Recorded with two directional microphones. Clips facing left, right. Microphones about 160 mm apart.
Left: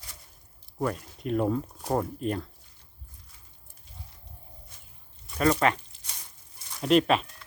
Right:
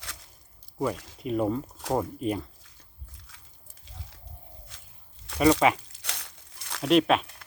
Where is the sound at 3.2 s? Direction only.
90° right.